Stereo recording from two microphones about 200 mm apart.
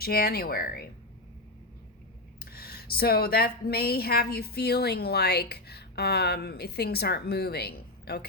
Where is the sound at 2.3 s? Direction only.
50° left (ahead or behind).